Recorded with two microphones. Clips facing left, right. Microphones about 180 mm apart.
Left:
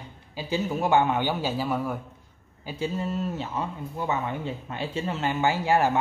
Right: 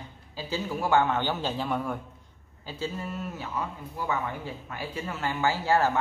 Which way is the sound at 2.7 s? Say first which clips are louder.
Left 5 dB; 20° left (ahead or behind).